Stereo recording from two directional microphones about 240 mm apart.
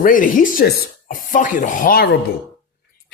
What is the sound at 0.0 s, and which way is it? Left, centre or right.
Speech, left.